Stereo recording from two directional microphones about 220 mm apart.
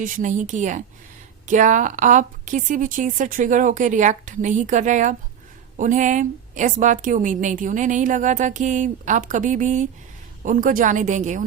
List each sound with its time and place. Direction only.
0.0 s a woman's voice: 35° right (ahead or behind)